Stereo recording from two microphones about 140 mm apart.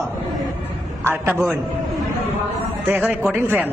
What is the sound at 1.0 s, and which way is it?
Speech, 15° right (ahead or behind).